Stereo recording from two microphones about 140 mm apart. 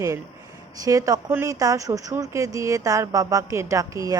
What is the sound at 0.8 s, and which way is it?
Speech, 25° right (ahead or behind).